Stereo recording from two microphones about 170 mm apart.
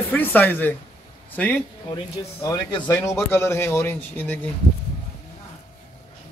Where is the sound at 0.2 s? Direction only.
10° left (ahead or behind).